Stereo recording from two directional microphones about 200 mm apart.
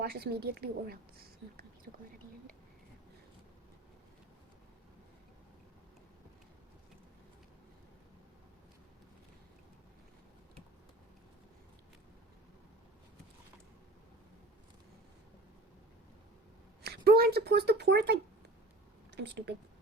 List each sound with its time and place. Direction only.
0.0 s a woman's voice: 50° right (ahead or behind)
16.8 s speech: 50° right (ahead or behind)